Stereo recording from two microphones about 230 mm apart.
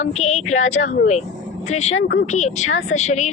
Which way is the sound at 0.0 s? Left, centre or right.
Left.